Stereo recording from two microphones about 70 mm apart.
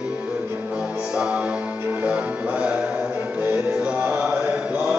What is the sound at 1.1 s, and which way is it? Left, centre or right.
Music, centre.